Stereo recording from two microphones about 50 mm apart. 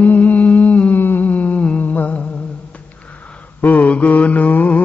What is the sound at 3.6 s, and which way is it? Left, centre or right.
Mantra, left.